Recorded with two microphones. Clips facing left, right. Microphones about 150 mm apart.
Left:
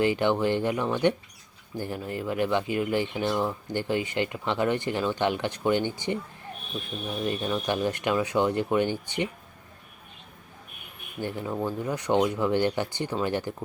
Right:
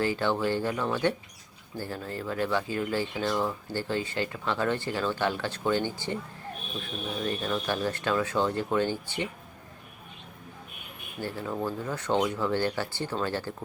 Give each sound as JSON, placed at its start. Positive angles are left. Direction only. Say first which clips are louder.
{"t": 0.0, "sound": "speech", "louder": "left 3 dB", "side_deg": 20}
{"t": 7.3, "sound": "speech", "louder": "left 3 dB", "side_deg": 15}
{"t": 11.2, "sound": "speech", "louder": "left 2 dB", "side_deg": 20}